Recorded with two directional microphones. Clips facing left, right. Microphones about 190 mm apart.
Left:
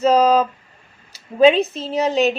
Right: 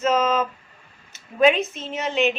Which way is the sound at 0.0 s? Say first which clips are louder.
Left 6 dB; 35° left (ahead or behind).